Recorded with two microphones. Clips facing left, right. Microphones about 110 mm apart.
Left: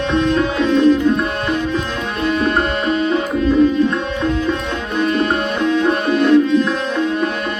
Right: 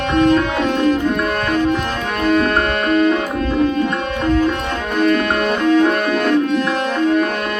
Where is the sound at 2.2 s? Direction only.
55° right (ahead or behind).